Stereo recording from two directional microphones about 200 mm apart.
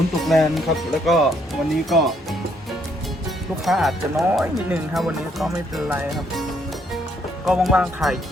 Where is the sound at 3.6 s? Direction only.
Centre (ahead or behind).